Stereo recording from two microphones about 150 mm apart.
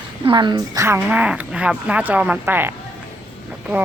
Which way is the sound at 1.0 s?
5° right (ahead or behind).